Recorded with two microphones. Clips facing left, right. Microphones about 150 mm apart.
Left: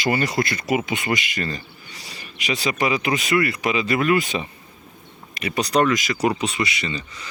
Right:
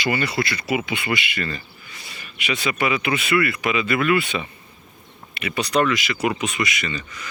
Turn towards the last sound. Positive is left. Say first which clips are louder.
# even
turn(degrees=25)  # may be behind; listen again after turning